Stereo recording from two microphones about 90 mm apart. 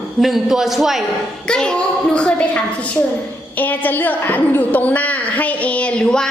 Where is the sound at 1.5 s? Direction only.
10° left (ahead or behind).